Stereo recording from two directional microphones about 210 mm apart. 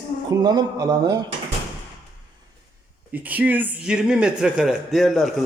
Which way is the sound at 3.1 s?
10° right (ahead or behind).